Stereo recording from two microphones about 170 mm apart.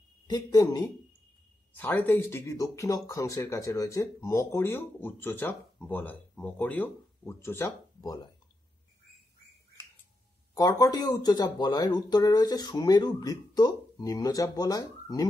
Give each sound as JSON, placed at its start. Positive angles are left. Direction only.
{"t": 0.3, "sound": "speech", "side_deg": 20}
{"t": 1.7, "sound": "speech", "side_deg": 10}
{"t": 10.5, "sound": "speech", "side_deg": 20}